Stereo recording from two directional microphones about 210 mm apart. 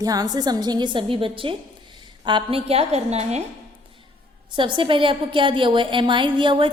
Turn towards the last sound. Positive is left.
turn(degrees=-25)  # may be behind; listen again after turning